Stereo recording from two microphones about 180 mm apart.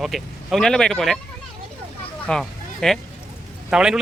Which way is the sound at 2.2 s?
5° left (ahead or behind).